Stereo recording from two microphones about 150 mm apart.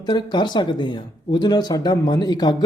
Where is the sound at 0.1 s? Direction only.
30° left (ahead or behind).